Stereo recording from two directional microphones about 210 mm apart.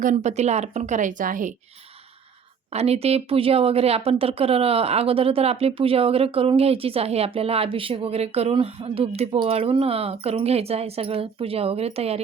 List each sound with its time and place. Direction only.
0.0 s a woman's voice: 35° right (ahead or behind)
2.7 s speech: 30° right (ahead or behind)